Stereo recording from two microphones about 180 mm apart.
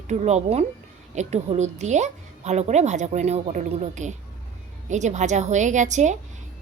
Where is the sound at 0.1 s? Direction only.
40° right (ahead or behind).